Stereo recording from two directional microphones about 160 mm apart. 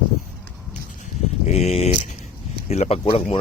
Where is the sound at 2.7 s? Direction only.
40° left (ahead or behind).